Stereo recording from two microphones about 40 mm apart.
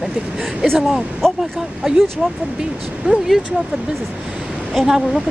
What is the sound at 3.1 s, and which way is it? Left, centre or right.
Speech, right.